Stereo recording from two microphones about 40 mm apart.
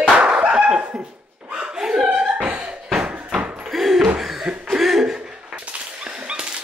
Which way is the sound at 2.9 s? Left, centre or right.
Centre.